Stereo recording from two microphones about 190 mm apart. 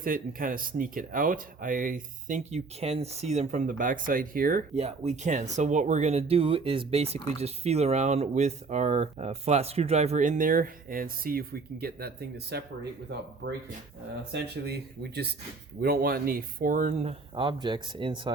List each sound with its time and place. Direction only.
0.0 s speech: 45° right (ahead or behind)
14.3 s speech: 60° right (ahead or behind); by 18.3 s 25° right (ahead or behind)